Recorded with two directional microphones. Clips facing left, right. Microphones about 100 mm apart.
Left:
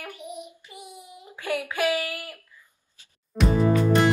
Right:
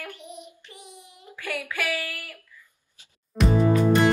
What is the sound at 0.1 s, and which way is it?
Child singing, 10° left (ahead or behind).